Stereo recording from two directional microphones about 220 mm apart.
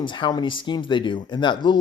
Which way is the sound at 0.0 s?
20° left (ahead or behind).